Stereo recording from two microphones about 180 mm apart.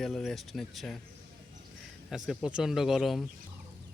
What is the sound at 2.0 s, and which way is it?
Speech, centre (ahead or behind).